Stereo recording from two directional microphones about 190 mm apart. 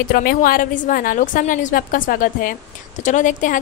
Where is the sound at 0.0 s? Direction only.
50° left (ahead or behind).